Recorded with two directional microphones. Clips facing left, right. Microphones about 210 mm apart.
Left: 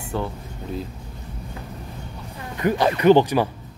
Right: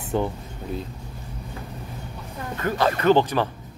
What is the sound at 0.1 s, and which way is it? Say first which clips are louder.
Speech: right 3 dB; 20° right (ahead or behind).